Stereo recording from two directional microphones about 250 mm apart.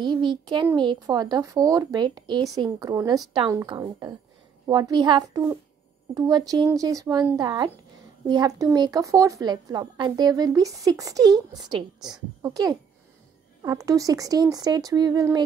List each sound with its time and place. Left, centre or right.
0.0 s a child's voice: centre